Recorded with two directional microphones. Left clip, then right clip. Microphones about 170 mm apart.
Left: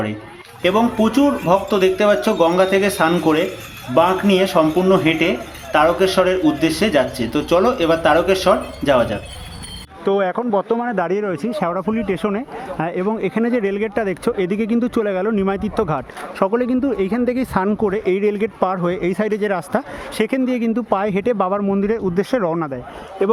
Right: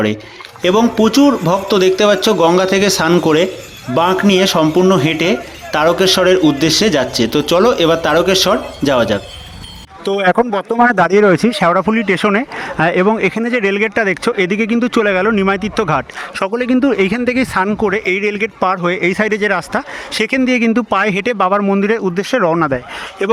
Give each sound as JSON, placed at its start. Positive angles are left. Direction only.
{"t": 0.6, "sound": "speech", "side_deg": -25}
{"t": 10.8, "sound": "speech", "side_deg": -20}
{"t": 22.4, "sound": "speech", "side_deg": -10}